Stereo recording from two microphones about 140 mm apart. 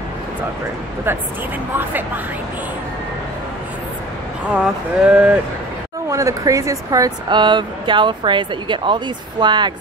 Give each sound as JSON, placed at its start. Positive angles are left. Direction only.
{"t": 4.5, "sound": "speech", "side_deg": -5}
{"t": 6.0, "sound": "speech", "side_deg": -25}